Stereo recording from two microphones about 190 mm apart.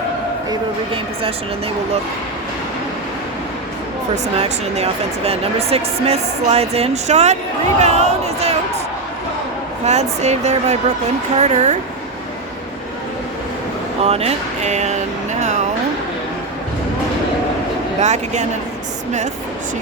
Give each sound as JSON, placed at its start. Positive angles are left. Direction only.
{"t": 4.1, "sound": "speech", "side_deg": -35}
{"t": 9.8, "sound": "speech", "side_deg": -35}
{"t": 14.0, "sound": "speech", "side_deg": -35}
{"t": 18.0, "sound": "speech", "side_deg": -35}